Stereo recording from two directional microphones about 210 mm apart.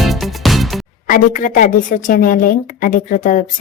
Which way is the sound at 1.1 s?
40° left (ahead or behind).